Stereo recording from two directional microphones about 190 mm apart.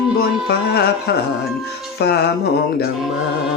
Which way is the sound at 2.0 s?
55° left (ahead or behind).